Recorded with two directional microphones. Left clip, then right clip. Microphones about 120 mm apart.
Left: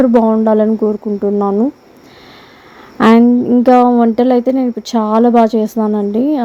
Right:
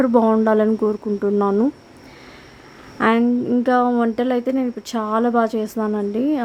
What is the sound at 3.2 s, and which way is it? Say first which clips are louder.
Speech: left 9 dB; 25° left (ahead or behind).